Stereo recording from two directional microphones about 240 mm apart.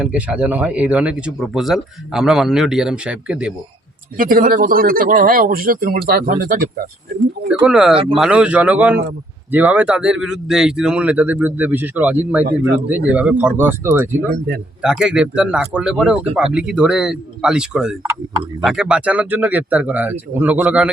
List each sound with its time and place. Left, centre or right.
0.0 s speech: centre
4.2 s speech: right
7.6 s speech: centre
12.5 s a man's voice: right
12.9 s speech: centre